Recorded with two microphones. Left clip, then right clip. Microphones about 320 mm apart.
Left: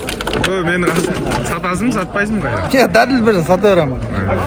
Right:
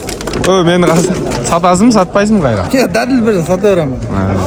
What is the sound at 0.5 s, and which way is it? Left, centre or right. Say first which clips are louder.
A man's voice: right 10 dB; centre.